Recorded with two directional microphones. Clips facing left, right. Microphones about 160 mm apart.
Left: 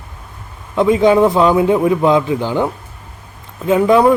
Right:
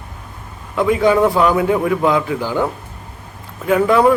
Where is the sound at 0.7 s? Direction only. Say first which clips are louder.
Left 3 dB; 20° left (ahead or behind).